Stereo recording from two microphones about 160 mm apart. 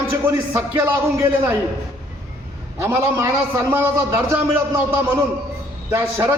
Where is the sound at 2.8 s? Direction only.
15° right (ahead or behind).